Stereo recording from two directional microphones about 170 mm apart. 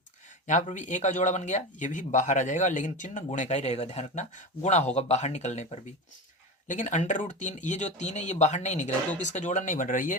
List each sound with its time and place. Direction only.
0.4 s speech: 45° left (ahead or behind)
6.7 s speech: 50° left (ahead or behind)